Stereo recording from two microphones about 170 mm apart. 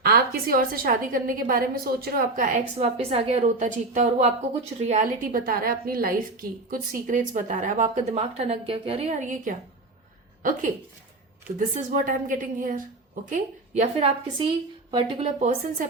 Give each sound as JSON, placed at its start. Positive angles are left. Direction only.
{"t": 0.0, "sound": "a woman's voice", "side_deg": -60}
{"t": 2.7, "sound": "a woman's voice", "side_deg": -35}
{"t": 5.3, "sound": "a woman's voice", "side_deg": -55}
{"t": 11.7, "sound": "a woman's voice", "side_deg": -50}
{"t": 13.3, "sound": "a woman's voice", "side_deg": -40}
{"t": 15.4, "sound": "a woman's voice", "side_deg": -40}